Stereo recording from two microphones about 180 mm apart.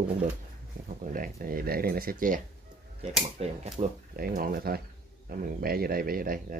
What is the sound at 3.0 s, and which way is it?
Speech, 35° right (ahead or behind).